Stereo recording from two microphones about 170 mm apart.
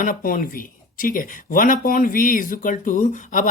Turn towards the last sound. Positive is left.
turn(degrees=50)  # may be behind; listen again after turning